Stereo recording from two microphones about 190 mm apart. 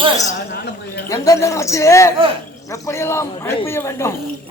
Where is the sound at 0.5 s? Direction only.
60° left (ahead or behind).